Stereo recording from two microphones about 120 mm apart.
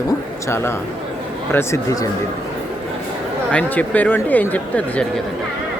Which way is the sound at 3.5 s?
10° left (ahead or behind).